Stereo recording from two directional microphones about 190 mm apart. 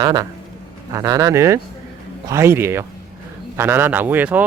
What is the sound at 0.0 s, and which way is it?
Speech, 20° right (ahead or behind).